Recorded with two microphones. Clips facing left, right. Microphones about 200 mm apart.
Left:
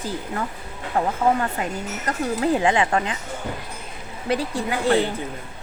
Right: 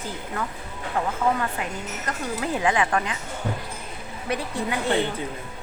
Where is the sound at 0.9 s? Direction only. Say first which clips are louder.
Left 4 dB; 35° left (ahead or behind).